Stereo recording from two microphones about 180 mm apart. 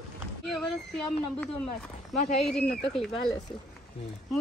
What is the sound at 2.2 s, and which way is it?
Speech, 40° left (ahead or behind).